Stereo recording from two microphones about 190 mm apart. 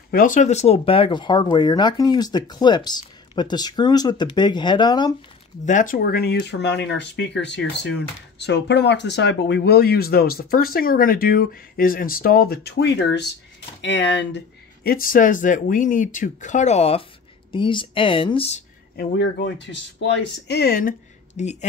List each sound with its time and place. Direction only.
0.1 s speech: 45° left (ahead or behind); by 5.1 s 20° left (ahead or behind)
5.7 s speech: 45° left (ahead or behind)
18.9 s speech: 65° left (ahead or behind)
21.4 s speech: 35° left (ahead or behind)